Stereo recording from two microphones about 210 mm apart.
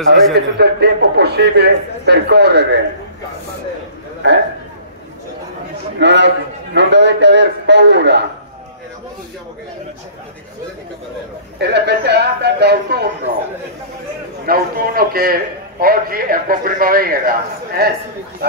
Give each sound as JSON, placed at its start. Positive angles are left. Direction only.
{"t": 0.3, "sound": "a man's voice", "side_deg": -50}
{"t": 5.9, "sound": "a man's voice", "side_deg": -55}
{"t": 11.5, "sound": "a man's voice", "side_deg": -55}
{"t": 14.4, "sound": "a man's voice", "side_deg": -45}